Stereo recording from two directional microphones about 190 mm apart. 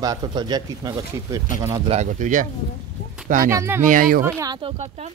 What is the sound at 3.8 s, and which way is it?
Speech, 45° right (ahead or behind).